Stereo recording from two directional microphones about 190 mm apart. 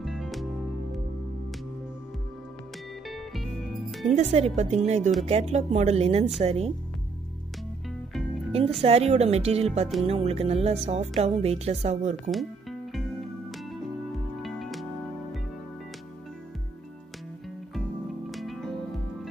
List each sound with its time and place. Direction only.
0.0 s music: centre (ahead or behind)
4.1 s speech: 35° right (ahead or behind)
8.5 s music: 30° right (ahead or behind)
8.8 s speech: 35° right (ahead or behind)
14.4 s music: centre (ahead or behind)
18.3 s music: centre (ahead or behind)